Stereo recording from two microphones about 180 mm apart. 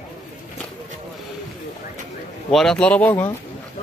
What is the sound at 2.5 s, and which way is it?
Speech, centre (ahead or behind).